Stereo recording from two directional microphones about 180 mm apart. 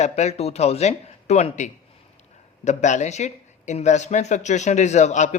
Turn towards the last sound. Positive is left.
turn(degrees=40)  # may be behind; listen again after turning